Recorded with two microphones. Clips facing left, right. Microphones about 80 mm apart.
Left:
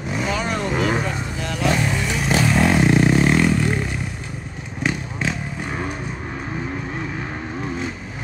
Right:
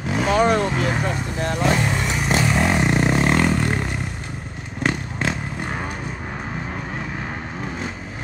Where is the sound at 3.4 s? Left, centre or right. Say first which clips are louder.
Left 1 dB; right.